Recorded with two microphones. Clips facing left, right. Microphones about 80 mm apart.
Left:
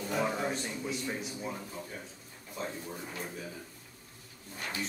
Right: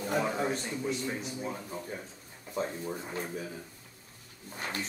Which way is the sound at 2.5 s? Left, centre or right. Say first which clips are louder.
Right 5 dB; right.